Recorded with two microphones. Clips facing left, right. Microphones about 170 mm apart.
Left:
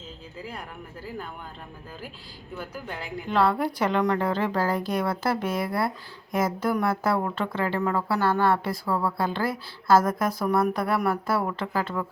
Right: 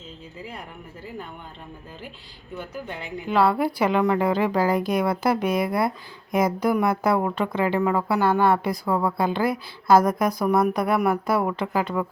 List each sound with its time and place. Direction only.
2.6 s speech: centre (ahead or behind); by 12.0 s 15° right (ahead or behind)